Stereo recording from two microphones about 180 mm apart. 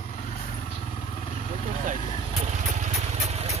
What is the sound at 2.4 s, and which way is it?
Vehicle, 40° right (ahead or behind).